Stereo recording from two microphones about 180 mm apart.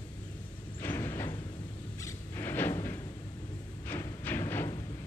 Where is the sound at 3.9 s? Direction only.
15° left (ahead or behind).